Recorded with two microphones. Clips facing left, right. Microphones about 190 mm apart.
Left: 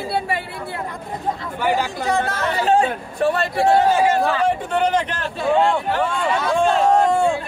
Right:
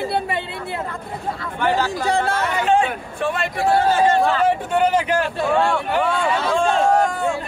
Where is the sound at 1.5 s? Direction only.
10° left (ahead or behind).